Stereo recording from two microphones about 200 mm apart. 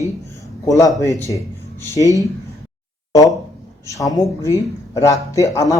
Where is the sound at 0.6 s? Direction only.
15° left (ahead or behind).